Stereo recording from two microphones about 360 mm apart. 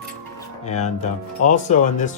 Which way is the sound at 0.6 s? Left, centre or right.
Centre.